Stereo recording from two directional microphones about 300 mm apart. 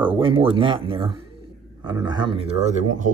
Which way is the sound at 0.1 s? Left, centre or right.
Centre.